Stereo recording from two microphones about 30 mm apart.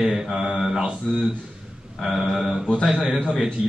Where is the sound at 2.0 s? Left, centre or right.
Centre.